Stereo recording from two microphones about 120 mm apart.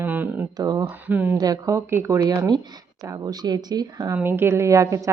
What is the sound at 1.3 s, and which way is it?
A woman's voice, 30° right (ahead or behind).